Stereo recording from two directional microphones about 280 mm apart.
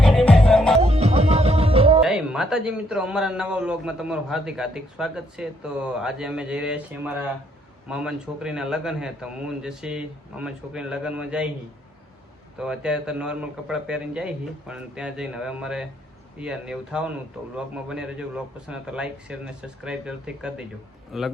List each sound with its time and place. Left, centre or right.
0.0 s music: centre
0.8 s music: right
2.0 s a man's voice: centre
12.5 s a man's voice: centre